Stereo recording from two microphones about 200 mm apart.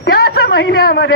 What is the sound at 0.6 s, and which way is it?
Speech, 55° left (ahead or behind).